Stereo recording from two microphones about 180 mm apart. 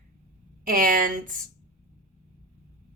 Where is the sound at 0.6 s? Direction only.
50° right (ahead or behind).